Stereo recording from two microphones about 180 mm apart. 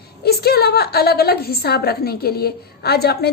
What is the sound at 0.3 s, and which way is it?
A woman's voice, 60° left (ahead or behind).